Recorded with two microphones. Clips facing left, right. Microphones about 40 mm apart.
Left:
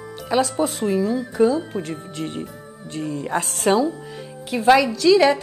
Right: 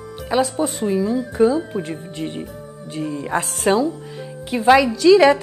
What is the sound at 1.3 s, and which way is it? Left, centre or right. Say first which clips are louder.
A woman's voice: right 2 dB; right.